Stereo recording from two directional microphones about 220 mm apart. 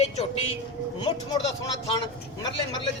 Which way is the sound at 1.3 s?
20° left (ahead or behind).